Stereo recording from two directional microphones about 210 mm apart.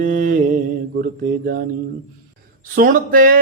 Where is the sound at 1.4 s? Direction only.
45° right (ahead or behind).